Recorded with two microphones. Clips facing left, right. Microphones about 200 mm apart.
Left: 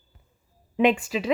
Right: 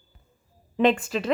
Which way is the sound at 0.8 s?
10° left (ahead or behind).